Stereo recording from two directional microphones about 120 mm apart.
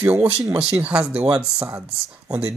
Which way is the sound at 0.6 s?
5° right (ahead or behind).